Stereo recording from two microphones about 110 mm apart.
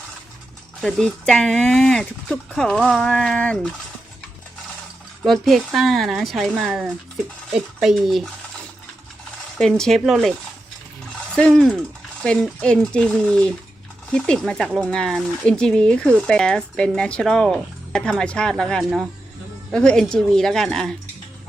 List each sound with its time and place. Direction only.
0.8 s speech: 5° left (ahead or behind)
5.2 s speech: centre (ahead or behind)
9.6 s speech: 5° left (ahead or behind)
11.3 s speech: 5° left (ahead or behind)